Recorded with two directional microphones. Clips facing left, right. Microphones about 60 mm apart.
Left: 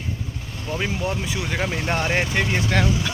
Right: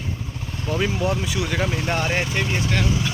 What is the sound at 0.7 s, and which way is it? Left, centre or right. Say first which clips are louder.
Speech: right 3 dB; centre.